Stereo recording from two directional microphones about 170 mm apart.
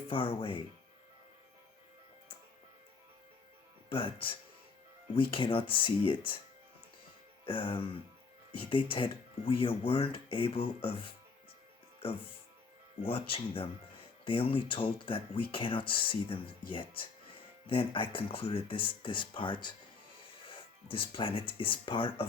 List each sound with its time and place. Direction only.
0.1 s speech: 30° left (ahead or behind)
3.8 s speech: 30° left (ahead or behind)
7.4 s speech: 30° left (ahead or behind)
13.0 s speech: 35° left (ahead or behind)